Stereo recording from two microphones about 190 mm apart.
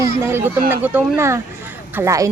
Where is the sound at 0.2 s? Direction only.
10° right (ahead or behind).